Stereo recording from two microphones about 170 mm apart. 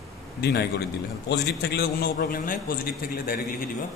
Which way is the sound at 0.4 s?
75° left (ahead or behind).